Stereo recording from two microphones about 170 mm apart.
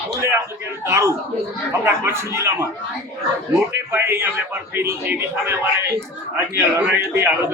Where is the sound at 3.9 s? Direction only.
15° right (ahead or behind).